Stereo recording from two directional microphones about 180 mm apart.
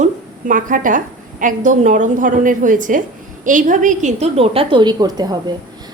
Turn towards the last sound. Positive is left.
turn(degrees=-20)  # may be behind; listen again after turning